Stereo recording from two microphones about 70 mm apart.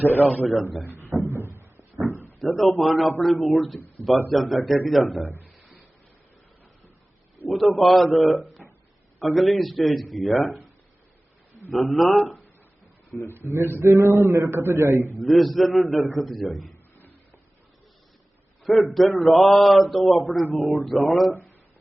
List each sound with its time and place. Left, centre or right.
0.0 s a man's voice: left
1.1 s a sound: centre
2.0 s a sound: left
2.6 s speech: centre
3.8 s speech: left
4.3 s speech: centre
5.2 s speech: left
7.5 s speech: centre
11.7 s speech: centre
13.5 s a man's voice: right
15.2 s speech: centre
18.6 s a man's voice: centre